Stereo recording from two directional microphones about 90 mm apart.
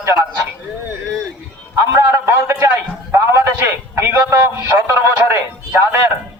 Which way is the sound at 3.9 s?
30° right (ahead or behind).